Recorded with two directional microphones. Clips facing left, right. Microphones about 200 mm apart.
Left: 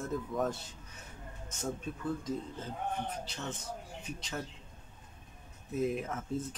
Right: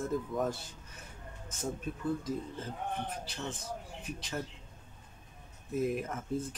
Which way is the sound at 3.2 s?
Centre (ahead or behind).